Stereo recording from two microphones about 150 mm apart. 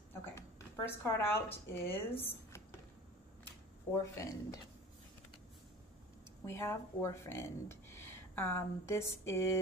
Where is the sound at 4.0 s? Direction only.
20° left (ahead or behind).